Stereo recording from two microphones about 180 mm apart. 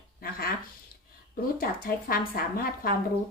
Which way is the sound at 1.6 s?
55° left (ahead or behind).